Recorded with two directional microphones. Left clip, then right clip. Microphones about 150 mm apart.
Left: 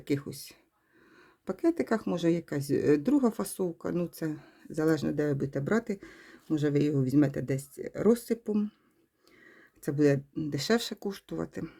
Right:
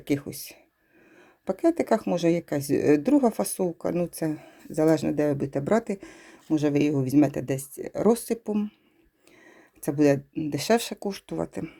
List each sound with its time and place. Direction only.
0.0 s speech: 10° right (ahead or behind)
9.5 s a sound: 10° right (ahead or behind)
10.5 s speech: 10° right (ahead or behind)